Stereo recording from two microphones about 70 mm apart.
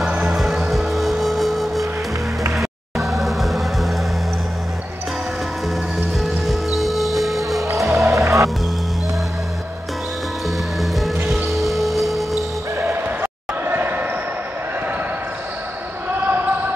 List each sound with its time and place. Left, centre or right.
0.0 s music: centre
6.2 s music: centre
7.9 s music: right
10.8 s music: centre
12.7 s music: right
13.2 s basketball bounce: right
16.1 s basketball bounce: right